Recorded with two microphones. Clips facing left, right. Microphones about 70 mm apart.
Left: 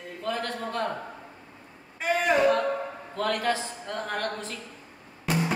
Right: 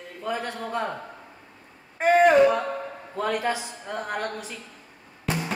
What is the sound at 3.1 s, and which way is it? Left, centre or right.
Speech, centre.